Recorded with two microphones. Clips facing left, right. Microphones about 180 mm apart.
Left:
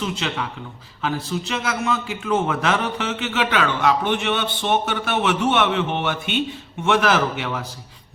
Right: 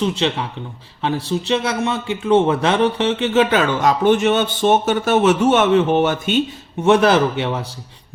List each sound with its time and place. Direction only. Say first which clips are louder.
0.0 s a man's voice: right 6 dB; 30° right (ahead or behind)